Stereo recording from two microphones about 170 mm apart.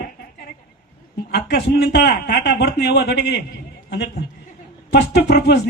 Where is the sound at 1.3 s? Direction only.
80° left.